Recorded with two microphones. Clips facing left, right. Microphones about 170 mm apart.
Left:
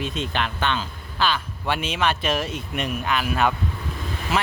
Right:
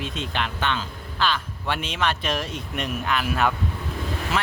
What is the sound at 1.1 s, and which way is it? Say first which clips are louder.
Speech: left 1 dB; 5° left (ahead or behind).